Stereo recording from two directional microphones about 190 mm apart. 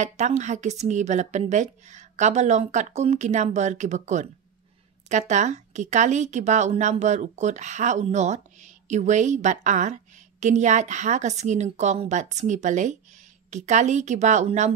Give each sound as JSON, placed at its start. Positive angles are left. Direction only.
{"t": 0.0, "sound": "speech", "side_deg": -40}